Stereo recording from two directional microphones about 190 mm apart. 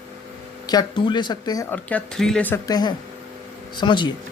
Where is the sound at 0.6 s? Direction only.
20° left (ahead or behind).